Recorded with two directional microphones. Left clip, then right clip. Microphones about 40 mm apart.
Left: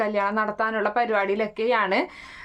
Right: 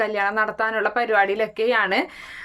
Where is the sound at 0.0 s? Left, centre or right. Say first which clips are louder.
Right 2 dB; centre.